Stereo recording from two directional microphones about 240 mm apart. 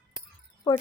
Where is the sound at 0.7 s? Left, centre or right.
Centre.